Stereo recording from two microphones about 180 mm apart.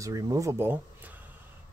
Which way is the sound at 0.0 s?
20° right (ahead or behind).